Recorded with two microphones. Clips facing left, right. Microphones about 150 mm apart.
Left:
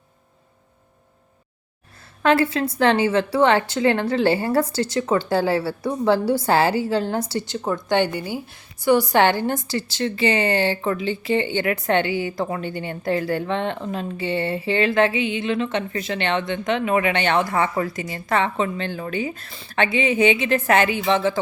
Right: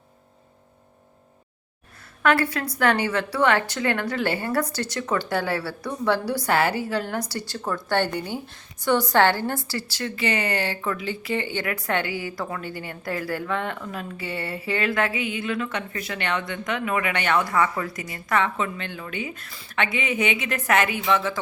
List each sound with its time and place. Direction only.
2.2 s a woman's voice: 25° left (ahead or behind)
8.1 s a woman's voice: 5° left (ahead or behind); by 21.3 s 30° left (ahead or behind)